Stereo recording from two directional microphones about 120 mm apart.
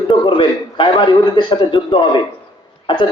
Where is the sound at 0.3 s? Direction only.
40° left (ahead or behind).